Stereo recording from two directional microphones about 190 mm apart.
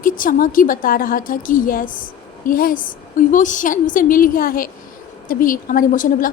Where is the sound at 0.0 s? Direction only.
45° left (ahead or behind).